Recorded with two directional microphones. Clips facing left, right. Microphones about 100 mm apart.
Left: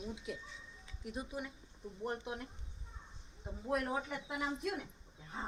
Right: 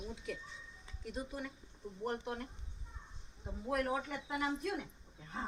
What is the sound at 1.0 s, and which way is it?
Speech, 15° left (ahead or behind).